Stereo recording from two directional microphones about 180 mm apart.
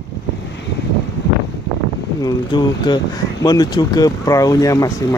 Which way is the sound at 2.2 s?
20° left (ahead or behind).